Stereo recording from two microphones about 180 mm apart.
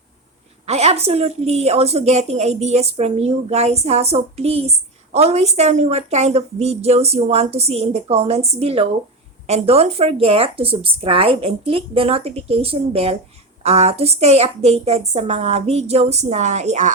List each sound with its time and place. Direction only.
0.6 s a woman's voice: 35° right (ahead or behind)